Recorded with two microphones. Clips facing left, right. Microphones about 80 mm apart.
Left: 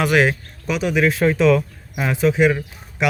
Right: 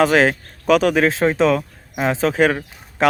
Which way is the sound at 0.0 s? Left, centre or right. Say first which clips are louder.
Right 2 dB; right.